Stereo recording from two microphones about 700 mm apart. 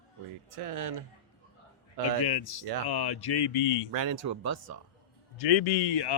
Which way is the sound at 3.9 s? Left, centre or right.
Right.